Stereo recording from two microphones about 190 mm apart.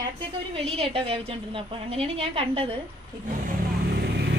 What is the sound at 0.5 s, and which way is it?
A woman's voice, 30° right (ahead or behind).